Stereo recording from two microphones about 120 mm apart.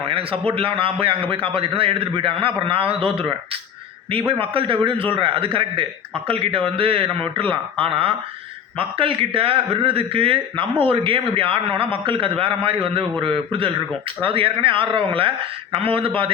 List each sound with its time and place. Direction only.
0.1 s a man's voice: 50° right (ahead or behind)